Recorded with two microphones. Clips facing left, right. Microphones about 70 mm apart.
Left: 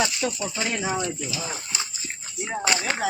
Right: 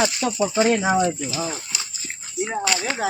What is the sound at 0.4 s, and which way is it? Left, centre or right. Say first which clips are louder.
Speech: right 9 dB; right.